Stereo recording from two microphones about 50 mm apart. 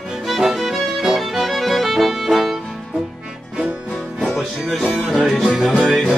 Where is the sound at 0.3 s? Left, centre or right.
Centre.